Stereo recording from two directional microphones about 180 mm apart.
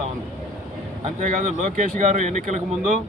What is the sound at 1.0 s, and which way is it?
Speech, 45° right (ahead or behind).